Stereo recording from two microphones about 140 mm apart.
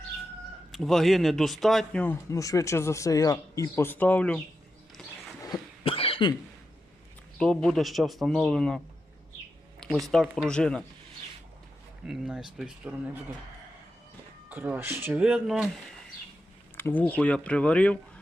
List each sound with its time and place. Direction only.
0.7 s speech: centre (ahead or behind)
2.3 s speech: 25° left (ahead or behind)
5.0 s a sound: 5° left (ahead or behind)
5.8 s cough: 40° left (ahead or behind)
7.3 s speech: 5° left (ahead or behind)
10.1 s speech: 5° left (ahead or behind)
12.0 s speech: 5° right (ahead or behind)
14.5 s speech: 15° right (ahead or behind)
16.7 s speech: 15° left (ahead or behind)